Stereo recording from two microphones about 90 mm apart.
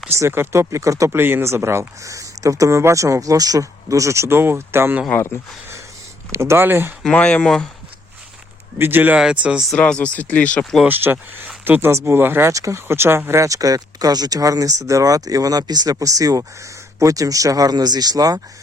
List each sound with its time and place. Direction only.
0.2 s speech: 30° right (ahead or behind)
5.1 s speech: 25° left (ahead or behind)
6.3 s speech: 30° right (ahead or behind)
7.0 s speech: 10° left (ahead or behind)
8.8 s speech: 20° right (ahead or behind)
9.7 s speech: 15° left (ahead or behind)
10.8 s speech: 25° right (ahead or behind)
12.5 s speech: 35° right (ahead or behind)